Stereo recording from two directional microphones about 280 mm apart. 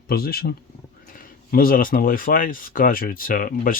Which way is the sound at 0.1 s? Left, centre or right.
Left.